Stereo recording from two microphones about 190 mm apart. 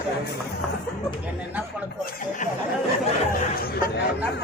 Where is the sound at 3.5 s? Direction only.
50° left (ahead or behind).